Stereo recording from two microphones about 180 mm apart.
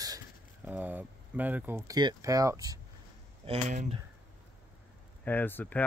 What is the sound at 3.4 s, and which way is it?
Speech, 45° right (ahead or behind).